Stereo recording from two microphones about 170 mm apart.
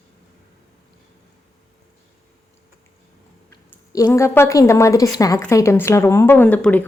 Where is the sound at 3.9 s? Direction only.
20° left (ahead or behind).